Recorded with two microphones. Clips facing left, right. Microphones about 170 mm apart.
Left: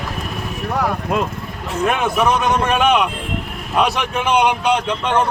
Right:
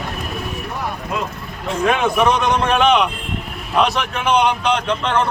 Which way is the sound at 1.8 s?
5° left (ahead or behind).